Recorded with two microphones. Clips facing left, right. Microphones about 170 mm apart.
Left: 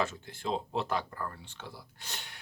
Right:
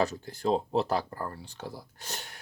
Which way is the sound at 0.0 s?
40° right (ahead or behind).